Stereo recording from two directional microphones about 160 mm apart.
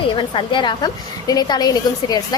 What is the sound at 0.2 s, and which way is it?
A woman's voice, 30° left (ahead or behind).